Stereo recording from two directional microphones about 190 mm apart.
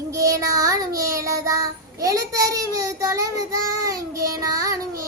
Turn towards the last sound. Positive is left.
turn(degrees=-20)  # may be behind; listen again after turning